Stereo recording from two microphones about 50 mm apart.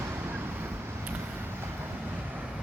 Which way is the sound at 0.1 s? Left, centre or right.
Right.